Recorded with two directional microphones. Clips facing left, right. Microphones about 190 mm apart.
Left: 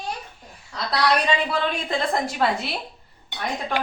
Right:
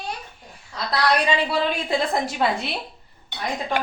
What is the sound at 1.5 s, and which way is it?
A woman's voice, 5° right (ahead or behind).